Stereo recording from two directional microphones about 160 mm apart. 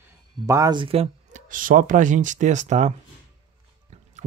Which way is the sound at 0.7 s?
35° right (ahead or behind).